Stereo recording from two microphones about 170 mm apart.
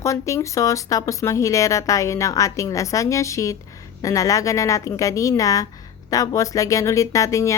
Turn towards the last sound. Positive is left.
turn(degrees=20)  # may be behind; listen again after turning